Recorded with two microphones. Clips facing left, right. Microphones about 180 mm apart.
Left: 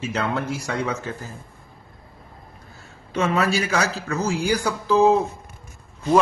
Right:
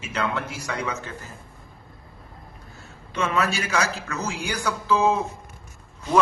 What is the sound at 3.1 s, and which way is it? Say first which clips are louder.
Speech: left 3 dB; 40° left (ahead or behind).